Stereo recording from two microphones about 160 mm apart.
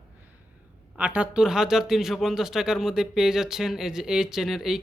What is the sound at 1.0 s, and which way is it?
Speech, 5° right (ahead or behind).